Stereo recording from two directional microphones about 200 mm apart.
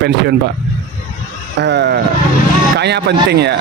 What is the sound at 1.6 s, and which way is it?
A man's voice, 60° right (ahead or behind).